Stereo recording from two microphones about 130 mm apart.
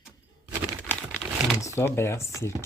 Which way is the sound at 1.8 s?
20° left (ahead or behind).